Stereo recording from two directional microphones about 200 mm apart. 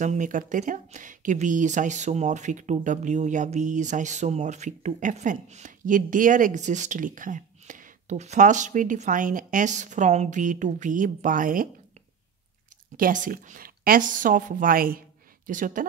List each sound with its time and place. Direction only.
0.0 s speech: 40° right (ahead or behind)
12.9 s a woman's voice: 45° right (ahead or behind)